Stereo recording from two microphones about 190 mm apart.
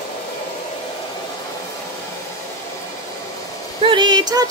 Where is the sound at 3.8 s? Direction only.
25° right (ahead or behind).